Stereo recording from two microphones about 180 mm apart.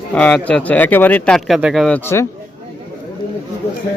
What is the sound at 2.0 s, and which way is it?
Speech, 15° left (ahead or behind).